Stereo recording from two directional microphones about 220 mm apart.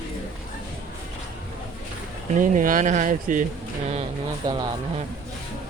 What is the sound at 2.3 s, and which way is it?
Speech, 35° right (ahead or behind).